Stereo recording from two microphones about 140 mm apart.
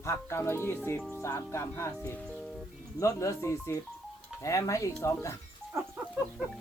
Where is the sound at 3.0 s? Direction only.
20° left (ahead or behind).